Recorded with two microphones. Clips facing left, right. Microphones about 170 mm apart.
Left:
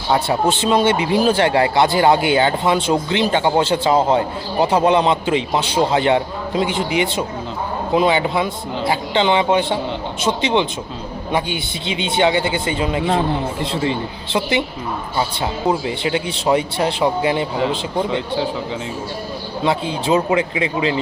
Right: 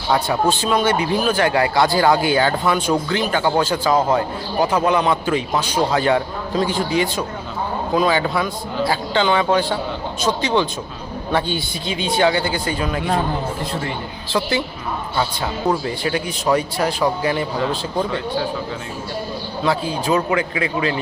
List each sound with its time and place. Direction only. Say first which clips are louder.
0.1 s speech: left 1 dB; 25° left (ahead or behind)
15.7 s speech: left 1 dB; 20° left (ahead or behind)
19.6 s speech: left 1 dB; 25° left (ahead or behind)